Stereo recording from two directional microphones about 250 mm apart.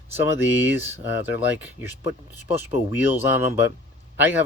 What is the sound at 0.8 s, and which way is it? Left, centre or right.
Speech, centre.